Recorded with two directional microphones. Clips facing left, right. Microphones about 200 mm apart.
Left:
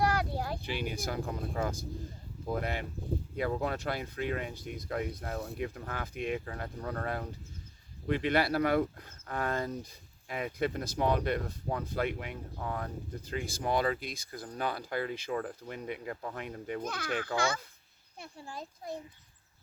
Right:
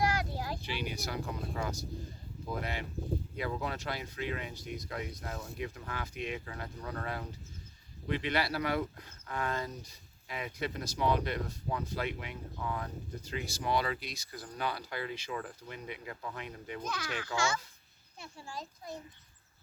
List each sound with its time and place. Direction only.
0.0 s a child's voice: 60° left (ahead or behind)